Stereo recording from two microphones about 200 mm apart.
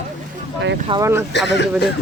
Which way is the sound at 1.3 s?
60° left (ahead or behind).